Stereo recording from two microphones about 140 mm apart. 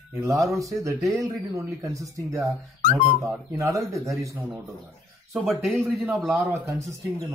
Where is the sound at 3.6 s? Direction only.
25° right (ahead or behind).